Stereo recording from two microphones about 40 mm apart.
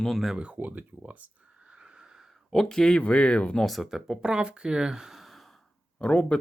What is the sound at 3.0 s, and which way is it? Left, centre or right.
Speech, left.